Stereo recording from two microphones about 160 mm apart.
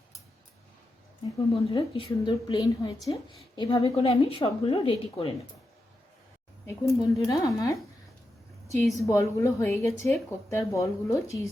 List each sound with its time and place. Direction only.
1.7 s a woman's voice: 30° left (ahead or behind)
6.7 s speech: 20° left (ahead or behind)
8.6 s a sound: 20° left (ahead or behind)
9.0 s speech: 20° left (ahead or behind)